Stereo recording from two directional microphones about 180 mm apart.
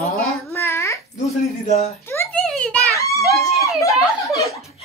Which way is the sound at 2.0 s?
10° left (ahead or behind).